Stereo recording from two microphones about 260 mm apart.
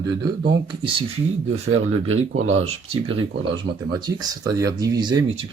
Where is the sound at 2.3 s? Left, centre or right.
Right.